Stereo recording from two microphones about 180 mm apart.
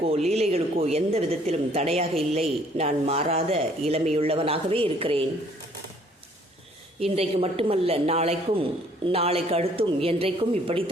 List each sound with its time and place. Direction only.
0.0 s a man's voice: 35° right (ahead or behind)
7.0 s a man's voice: 35° right (ahead or behind)